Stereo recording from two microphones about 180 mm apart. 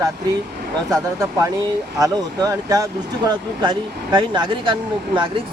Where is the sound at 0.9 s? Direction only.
15° right (ahead or behind).